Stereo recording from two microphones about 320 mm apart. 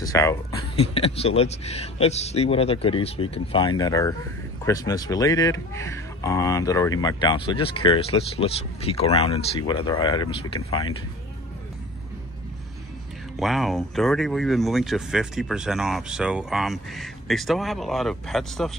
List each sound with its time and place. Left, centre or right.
0.0 s speech: centre
13.4 s speech: centre